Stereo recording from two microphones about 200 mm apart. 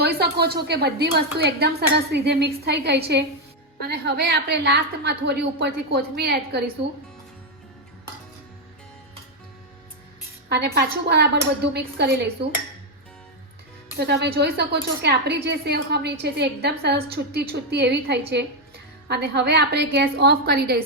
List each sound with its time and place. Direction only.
0.0 s a woman's voice: 55° right (ahead or behind)
10.5 s a woman's voice: 55° right (ahead or behind)
13.9 s a woman's voice: 55° right (ahead or behind)